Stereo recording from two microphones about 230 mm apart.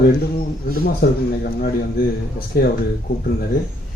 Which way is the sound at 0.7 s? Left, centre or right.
Left.